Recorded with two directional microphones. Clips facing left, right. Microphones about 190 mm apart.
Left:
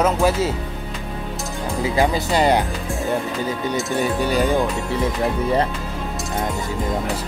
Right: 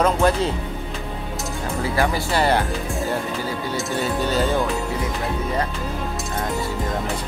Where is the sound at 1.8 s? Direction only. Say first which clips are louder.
Left 3 dB; 20° left (ahead or behind).